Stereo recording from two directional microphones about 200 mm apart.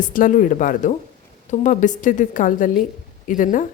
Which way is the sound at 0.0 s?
40° left (ahead or behind).